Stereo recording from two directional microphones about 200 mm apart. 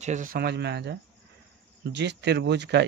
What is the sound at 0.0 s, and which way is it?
Speech, 40° right (ahead or behind).